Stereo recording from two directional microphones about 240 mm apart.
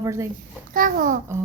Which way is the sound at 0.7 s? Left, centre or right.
Right.